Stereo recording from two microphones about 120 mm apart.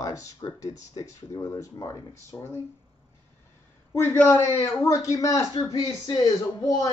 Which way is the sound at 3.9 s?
20° left (ahead or behind).